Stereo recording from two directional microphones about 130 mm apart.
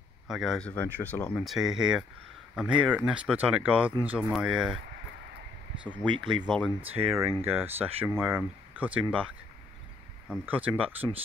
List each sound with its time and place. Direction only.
0.3 s speech: centre (ahead or behind)
1.4 s speech: centre (ahead or behind)
6.0 s speech: 40° right (ahead or behind)
6.4 s speech: 5° right (ahead or behind)
10.2 s speech: 10° right (ahead or behind)